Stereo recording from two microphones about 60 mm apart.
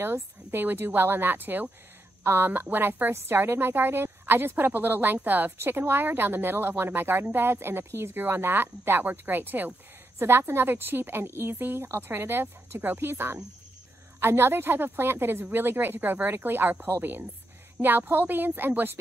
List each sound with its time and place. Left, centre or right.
0.0 s speech: right